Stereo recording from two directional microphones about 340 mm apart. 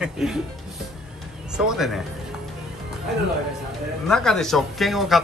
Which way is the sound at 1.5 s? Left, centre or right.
Centre.